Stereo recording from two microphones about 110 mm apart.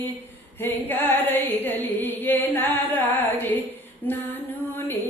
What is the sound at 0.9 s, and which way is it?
Music, 20° left (ahead or behind).